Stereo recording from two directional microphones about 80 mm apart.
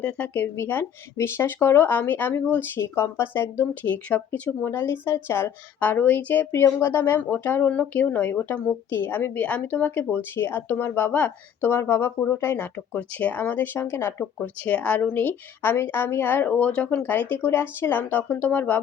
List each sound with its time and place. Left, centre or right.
0.0 s speech: centre
0.4 s a woman's voice: left
14.4 s a woman's voice: centre